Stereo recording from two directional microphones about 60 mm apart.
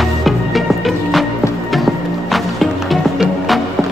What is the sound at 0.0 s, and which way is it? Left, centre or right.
Music, centre.